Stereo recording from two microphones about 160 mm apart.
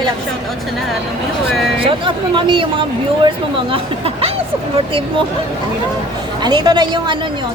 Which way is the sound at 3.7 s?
35° right (ahead or behind).